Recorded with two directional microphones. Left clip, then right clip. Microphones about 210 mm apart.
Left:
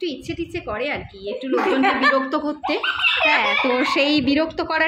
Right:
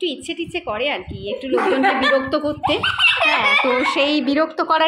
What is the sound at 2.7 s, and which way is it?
Speech, 35° right (ahead or behind).